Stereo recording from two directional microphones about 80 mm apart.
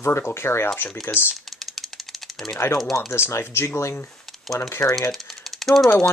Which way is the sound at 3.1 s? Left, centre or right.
Left.